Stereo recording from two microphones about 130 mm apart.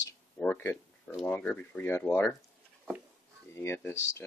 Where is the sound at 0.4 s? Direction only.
15° left (ahead or behind).